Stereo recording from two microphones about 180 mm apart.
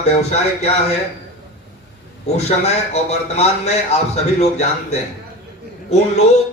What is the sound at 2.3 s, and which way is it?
A man's voice, 35° left (ahead or behind).